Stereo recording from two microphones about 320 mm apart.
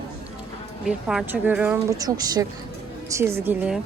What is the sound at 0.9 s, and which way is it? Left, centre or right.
A woman's voice, centre.